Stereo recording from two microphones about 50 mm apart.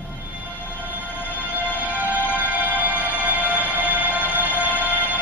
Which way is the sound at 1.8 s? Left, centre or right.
Right.